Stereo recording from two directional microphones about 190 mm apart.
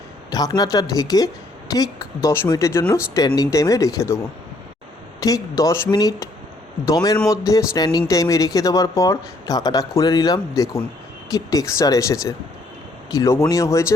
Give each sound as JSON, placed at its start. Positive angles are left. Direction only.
{"t": 0.3, "sound": "speech", "side_deg": 20}
{"t": 5.2, "sound": "speech", "side_deg": 20}